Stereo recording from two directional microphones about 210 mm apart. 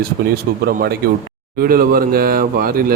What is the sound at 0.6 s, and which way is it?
A man's voice, 45° right (ahead or behind).